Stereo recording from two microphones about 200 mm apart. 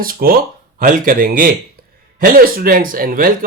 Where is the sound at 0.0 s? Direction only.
45° right (ahead or behind).